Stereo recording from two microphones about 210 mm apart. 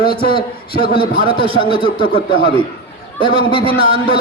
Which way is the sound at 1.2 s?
25° right (ahead or behind).